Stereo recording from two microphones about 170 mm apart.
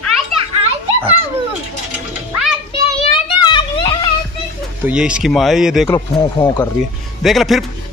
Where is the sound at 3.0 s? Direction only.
30° left (ahead or behind).